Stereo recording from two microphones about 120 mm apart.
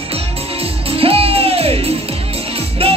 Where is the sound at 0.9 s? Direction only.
55° right (ahead or behind).